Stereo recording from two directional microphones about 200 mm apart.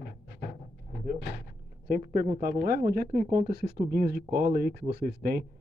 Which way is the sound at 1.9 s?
45° right (ahead or behind).